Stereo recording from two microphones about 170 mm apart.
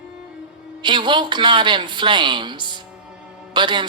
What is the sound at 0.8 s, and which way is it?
Speech, 25° right (ahead or behind).